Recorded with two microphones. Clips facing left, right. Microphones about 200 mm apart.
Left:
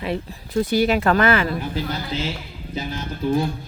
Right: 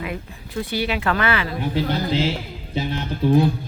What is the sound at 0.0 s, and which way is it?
Speech, 35° left (ahead or behind).